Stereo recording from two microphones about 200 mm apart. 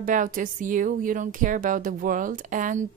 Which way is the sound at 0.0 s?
40° right (ahead or behind).